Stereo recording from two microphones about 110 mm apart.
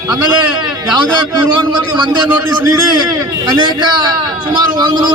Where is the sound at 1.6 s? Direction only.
45° right (ahead or behind).